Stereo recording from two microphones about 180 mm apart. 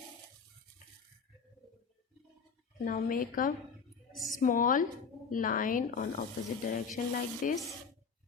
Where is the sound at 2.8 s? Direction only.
50° left (ahead or behind).